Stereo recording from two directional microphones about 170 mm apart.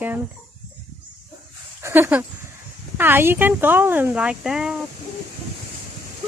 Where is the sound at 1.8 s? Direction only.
15° right (ahead or behind).